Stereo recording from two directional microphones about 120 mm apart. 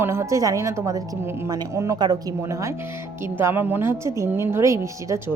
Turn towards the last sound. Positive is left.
turn(degrees=-25)  # may be behind; listen again after turning